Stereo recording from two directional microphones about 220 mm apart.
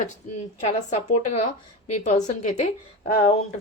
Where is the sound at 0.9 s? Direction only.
30° left (ahead or behind).